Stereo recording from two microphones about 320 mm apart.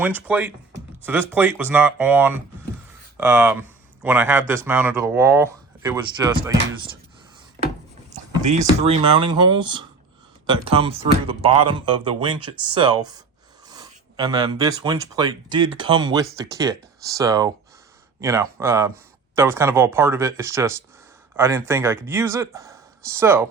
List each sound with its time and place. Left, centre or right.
0.0 s speech: centre
8.1 s speech: right